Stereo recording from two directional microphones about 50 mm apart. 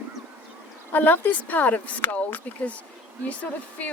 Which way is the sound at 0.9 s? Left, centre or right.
Left.